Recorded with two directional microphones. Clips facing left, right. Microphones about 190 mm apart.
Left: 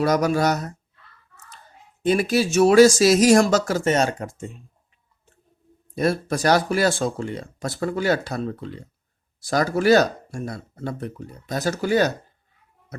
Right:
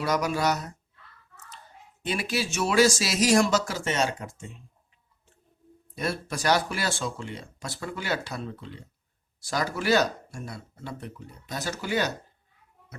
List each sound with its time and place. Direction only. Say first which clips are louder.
0.0 s speech: left 6 dB; 40° left (ahead or behind)
2.0 s speech: left 10 dB; 45° left (ahead or behind)
6.0 s speech: left 9 dB; 40° left (ahead or behind)